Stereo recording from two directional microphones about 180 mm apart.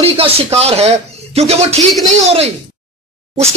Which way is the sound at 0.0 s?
35° right (ahead or behind).